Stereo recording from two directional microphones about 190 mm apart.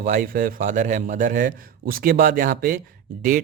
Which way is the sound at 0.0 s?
45° right (ahead or behind).